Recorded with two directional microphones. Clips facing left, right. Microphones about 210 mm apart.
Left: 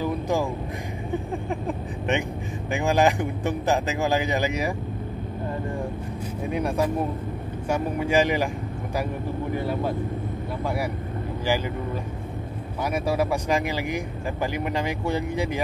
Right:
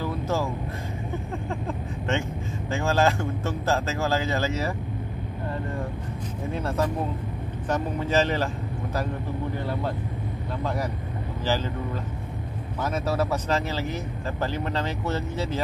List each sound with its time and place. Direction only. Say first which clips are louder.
0.0 s a sound: left 2 dB; 15° left (ahead or behind)
1.1 s vehicle: left 5 dB; 15° left (ahead or behind)
2.7 s speech: left 2 dB; 15° left (ahead or behind)
6.4 s speech: left 2 dB; 15° left (ahead or behind)
12.8 s speech: left 2 dB; 10° left (ahead or behind)